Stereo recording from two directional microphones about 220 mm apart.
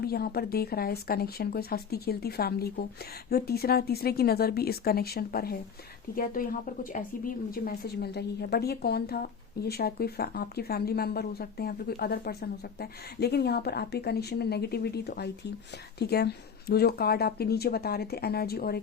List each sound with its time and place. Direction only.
0.0 s speech: 45° left (ahead or behind)